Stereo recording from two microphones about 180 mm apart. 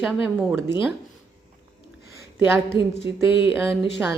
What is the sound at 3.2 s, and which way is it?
Speech, 10° right (ahead or behind).